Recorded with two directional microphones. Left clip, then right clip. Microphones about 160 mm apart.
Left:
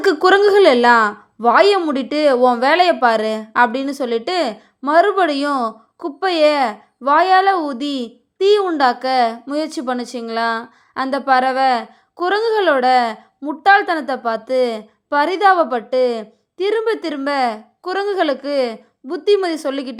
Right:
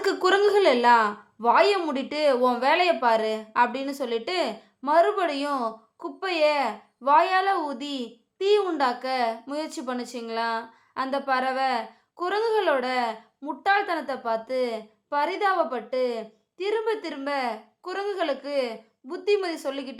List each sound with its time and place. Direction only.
0.0 s a woman's voice: 35° left (ahead or behind)